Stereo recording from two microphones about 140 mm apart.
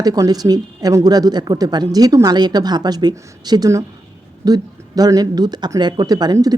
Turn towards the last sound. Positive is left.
turn(degrees=-25)  # may be behind; listen again after turning